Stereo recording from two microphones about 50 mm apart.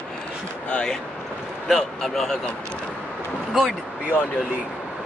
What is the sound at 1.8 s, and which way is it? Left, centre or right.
Speech, centre.